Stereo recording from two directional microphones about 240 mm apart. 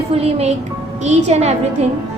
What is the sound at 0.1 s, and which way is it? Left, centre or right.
Speech, right.